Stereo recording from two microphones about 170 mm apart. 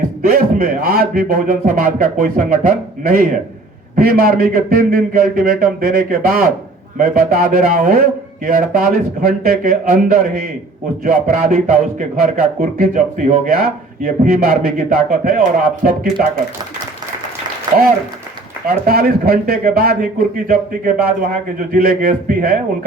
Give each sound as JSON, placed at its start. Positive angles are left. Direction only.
{"t": 0.2, "sound": "a man's voice", "side_deg": -55}
{"t": 18.7, "sound": "a man's voice", "side_deg": -60}